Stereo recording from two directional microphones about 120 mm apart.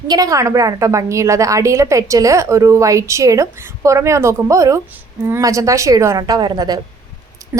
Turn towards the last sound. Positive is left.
turn(degrees=-35)  # may be behind; listen again after turning